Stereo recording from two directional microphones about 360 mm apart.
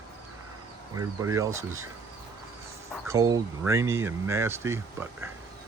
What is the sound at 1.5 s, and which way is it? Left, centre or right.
Speech, right.